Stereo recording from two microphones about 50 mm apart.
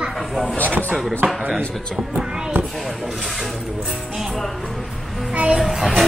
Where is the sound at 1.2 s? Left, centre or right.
Right.